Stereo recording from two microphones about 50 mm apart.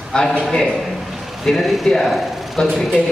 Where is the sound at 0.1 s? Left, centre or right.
Centre.